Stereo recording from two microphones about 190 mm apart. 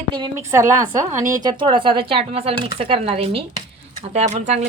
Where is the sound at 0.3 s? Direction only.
15° right (ahead or behind).